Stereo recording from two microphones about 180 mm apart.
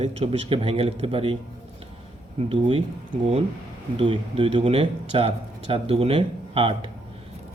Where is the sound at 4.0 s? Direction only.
30° right (ahead or behind).